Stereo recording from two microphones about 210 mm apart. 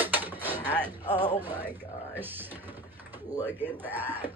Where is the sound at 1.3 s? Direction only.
10° right (ahead or behind).